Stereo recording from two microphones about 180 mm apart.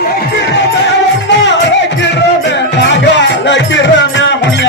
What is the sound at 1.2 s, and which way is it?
Music, 80° left.